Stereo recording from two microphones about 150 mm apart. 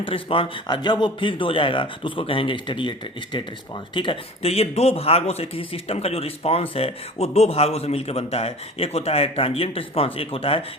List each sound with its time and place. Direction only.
0.0 s speech: 35° left (ahead or behind)
3.9 s speech: 35° left (ahead or behind)